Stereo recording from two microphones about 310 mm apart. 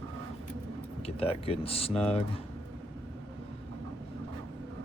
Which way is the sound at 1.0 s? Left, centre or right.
Centre.